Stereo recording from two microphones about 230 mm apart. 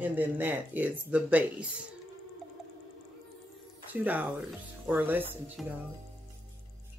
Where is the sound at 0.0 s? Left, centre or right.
Centre.